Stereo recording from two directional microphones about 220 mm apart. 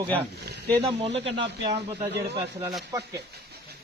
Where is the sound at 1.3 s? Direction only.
20° right (ahead or behind).